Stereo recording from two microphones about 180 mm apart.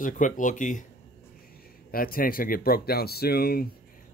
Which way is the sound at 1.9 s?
55° left (ahead or behind).